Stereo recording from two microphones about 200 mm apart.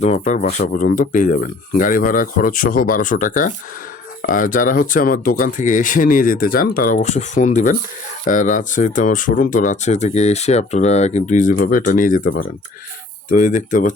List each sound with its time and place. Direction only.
0.0 s speech: 35° left (ahead or behind)
13.3 s speech: 40° left (ahead or behind)